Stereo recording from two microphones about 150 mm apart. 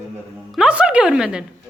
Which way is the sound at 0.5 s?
5° right (ahead or behind).